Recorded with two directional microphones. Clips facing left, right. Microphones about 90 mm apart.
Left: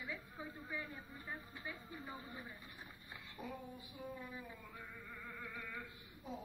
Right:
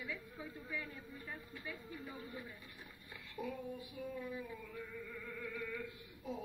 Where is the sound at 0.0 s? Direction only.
30° left (ahead or behind).